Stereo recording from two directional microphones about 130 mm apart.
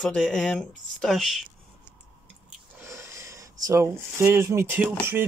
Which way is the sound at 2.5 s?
20° right (ahead or behind).